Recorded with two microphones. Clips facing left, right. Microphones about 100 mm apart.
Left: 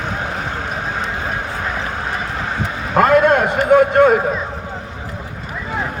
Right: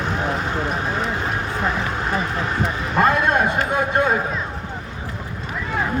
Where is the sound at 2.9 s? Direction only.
55° left (ahead or behind).